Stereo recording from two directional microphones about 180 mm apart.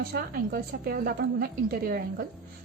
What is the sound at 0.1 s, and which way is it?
A woman's voice, 55° right (ahead or behind).